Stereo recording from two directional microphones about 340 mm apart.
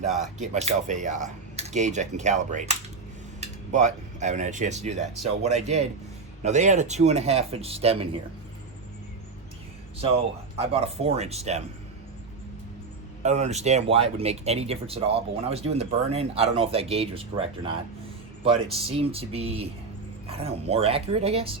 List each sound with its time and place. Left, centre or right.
0.3 s speech: right
10.7 s speech: centre
13.2 s speech: centre
18.8 s speech: centre